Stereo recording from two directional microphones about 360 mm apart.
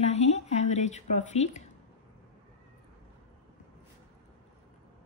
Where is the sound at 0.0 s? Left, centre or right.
Centre.